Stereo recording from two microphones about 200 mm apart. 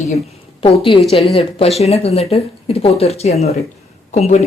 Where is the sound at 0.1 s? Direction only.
30° left (ahead or behind).